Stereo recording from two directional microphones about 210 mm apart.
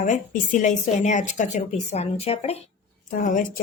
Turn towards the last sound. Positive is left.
turn(degrees=40)  # may be behind; listen again after turning